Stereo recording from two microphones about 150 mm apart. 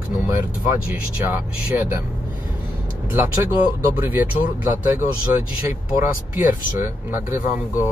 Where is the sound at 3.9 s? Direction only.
10° right (ahead or behind).